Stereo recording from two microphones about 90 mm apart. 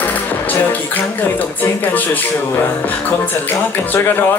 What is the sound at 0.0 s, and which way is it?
Music, 20° left (ahead or behind).